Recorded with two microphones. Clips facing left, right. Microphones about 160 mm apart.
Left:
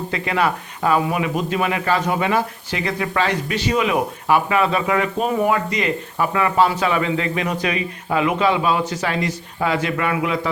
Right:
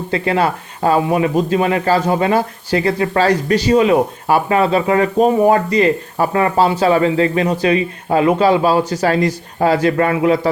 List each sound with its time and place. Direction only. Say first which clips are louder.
0.1 s speech: right 5 dB; 30° right (ahead or behind)